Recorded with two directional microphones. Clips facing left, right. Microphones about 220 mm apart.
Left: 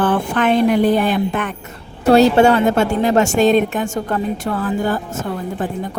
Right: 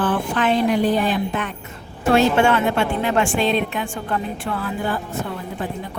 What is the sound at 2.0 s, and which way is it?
A woman's voice, 35° left (ahead or behind).